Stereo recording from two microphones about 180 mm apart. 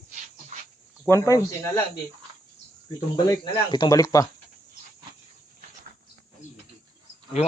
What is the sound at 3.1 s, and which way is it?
Speech, 25° left (ahead or behind).